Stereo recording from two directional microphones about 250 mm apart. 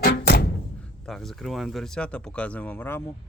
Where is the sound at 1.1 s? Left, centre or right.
Centre.